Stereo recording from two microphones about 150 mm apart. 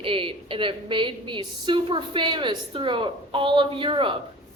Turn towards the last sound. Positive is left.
turn(degrees=-35)  # may be behind; listen again after turning